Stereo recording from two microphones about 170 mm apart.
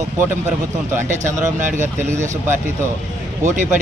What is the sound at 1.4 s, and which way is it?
Speech, 45° right (ahead or behind).